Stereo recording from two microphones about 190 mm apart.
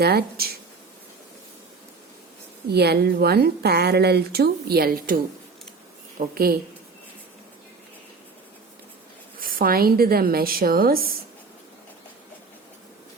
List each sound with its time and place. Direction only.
0.0 s a woman's voice: 55° right (ahead or behind)
2.6 s a woman's voice: 60° right (ahead or behind)
9.4 s a woman's voice: 50° right (ahead or behind)